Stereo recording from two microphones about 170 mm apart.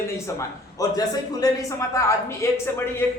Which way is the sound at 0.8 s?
20° left (ahead or behind).